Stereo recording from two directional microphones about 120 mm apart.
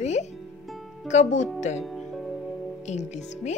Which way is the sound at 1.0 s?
85° left.